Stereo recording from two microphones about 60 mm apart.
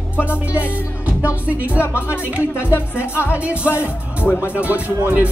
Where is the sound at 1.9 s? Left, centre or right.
Left.